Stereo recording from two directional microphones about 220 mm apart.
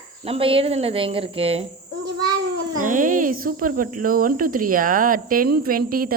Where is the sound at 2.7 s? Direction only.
35° right (ahead or behind).